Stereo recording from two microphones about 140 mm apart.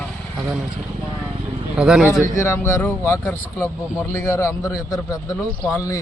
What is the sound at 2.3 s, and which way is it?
A man's voice, 20° left (ahead or behind).